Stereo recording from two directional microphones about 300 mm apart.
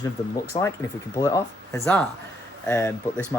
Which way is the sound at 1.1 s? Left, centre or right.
Centre.